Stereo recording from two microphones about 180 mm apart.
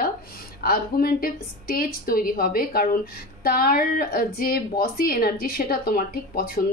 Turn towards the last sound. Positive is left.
turn(degrees=55)  # may be behind; listen again after turning